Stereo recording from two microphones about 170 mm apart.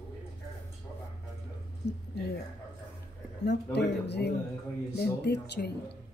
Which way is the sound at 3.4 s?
80° left.